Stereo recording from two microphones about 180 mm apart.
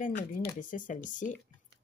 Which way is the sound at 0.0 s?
45° left (ahead or behind).